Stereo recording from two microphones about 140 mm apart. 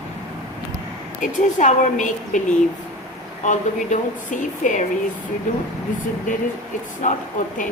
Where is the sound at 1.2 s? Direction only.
65° left (ahead or behind).